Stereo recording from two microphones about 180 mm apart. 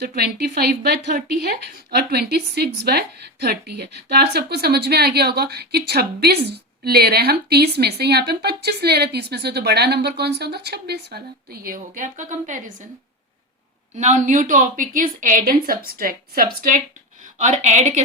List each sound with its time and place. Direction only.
0.0 s speech: 60° right (ahead or behind); by 12.7 s 45° right (ahead or behind)
13.9 s a woman's voice: 40° right (ahead or behind)
17.3 s speech: 40° right (ahead or behind)